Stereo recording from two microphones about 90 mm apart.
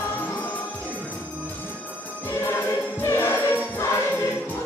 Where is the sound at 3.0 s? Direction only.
25° left (ahead or behind).